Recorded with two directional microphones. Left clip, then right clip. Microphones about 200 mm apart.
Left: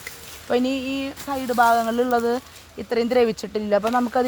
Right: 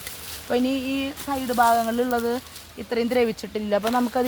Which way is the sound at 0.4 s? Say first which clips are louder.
Left 2 dB; 45° left (ahead or behind).